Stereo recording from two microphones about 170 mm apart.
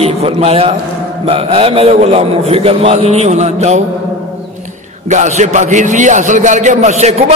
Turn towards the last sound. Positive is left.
turn(degrees=-40)  # may be behind; listen again after turning